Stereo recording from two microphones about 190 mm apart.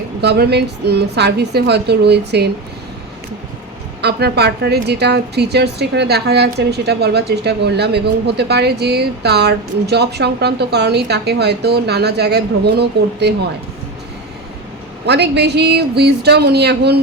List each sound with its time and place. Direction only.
0.2 s a woman's voice: 60° right (ahead or behind)
4.0 s a woman's voice: 60° right (ahead or behind)
15.0 s a woman's voice: 60° right (ahead or behind)